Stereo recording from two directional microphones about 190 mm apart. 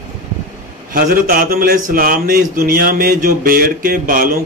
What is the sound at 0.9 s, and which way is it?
Speech, 50° right (ahead or behind).